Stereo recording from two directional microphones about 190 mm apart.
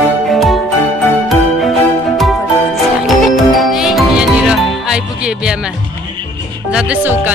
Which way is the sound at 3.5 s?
Centre (ahead or behind).